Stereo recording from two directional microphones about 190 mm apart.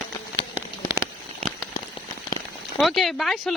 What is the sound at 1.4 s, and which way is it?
Rain on surface, 15° left (ahead or behind).